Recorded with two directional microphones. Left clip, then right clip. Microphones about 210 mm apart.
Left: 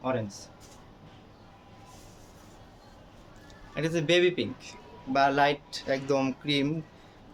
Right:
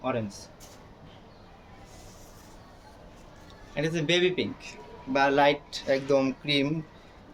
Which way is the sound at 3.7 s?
15° left (ahead or behind).